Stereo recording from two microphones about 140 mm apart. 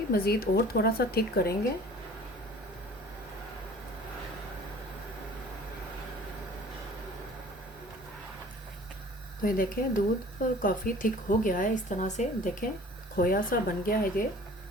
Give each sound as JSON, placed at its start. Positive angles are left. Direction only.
{"t": 0.1, "sound": "speech", "side_deg": 90}
{"t": 9.4, "sound": "speech", "side_deg": 75}
{"t": 13.1, "sound": "speech", "side_deg": 90}